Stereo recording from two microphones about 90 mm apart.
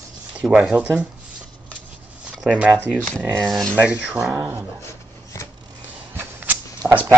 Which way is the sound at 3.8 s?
15° right (ahead or behind).